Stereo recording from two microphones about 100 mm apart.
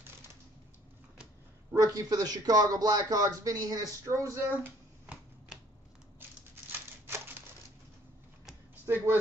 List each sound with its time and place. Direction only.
1.8 s speech: 40° right (ahead or behind)
7.1 s a sound: 25° right (ahead or behind)
8.8 s speech: 25° right (ahead or behind)